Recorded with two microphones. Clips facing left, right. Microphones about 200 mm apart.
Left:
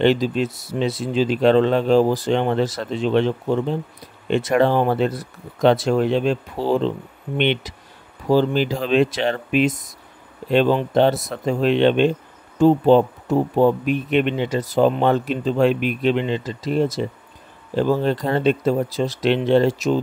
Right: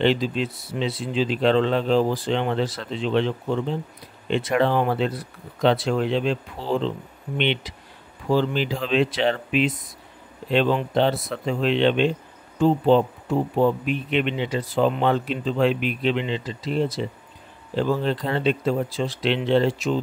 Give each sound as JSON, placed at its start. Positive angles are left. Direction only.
{"t": 0.0, "sound": "speech", "side_deg": 45}
{"t": 8.3, "sound": "speech", "side_deg": 40}
{"t": 12.6, "sound": "speech", "side_deg": 65}
{"t": 13.7, "sound": "speech", "side_deg": 50}